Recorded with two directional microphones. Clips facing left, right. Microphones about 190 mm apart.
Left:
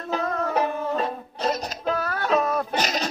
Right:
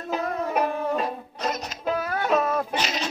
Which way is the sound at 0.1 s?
10° right (ahead or behind).